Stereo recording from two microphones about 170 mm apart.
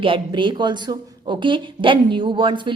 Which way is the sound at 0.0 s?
30° right (ahead or behind).